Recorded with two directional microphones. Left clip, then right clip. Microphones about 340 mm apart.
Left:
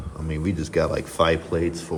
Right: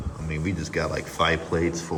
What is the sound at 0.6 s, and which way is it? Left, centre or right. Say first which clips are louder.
Speech: left 6 dB; centre.